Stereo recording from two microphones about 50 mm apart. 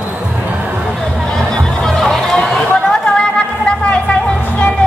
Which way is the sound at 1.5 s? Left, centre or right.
Centre.